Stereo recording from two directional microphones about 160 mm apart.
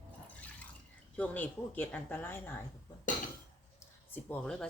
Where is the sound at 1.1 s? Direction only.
10° left (ahead or behind).